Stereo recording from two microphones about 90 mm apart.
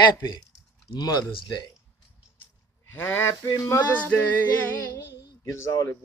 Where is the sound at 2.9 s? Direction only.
25° left (ahead or behind).